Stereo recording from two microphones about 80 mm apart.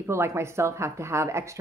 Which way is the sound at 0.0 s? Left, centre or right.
Right.